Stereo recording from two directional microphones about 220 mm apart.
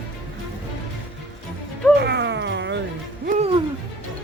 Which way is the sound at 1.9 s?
50° right (ahead or behind).